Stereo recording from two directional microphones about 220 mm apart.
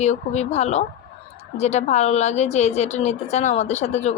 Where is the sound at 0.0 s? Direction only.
30° left (ahead or behind).